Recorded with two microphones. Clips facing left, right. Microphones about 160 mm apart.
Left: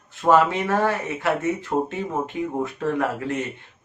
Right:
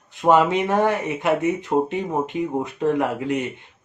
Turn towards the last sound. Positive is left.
turn(degrees=-15)  # may be behind; listen again after turning